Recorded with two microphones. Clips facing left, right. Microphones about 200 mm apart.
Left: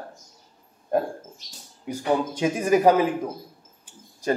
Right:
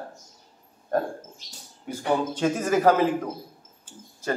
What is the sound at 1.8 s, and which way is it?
Speech, 10° left (ahead or behind).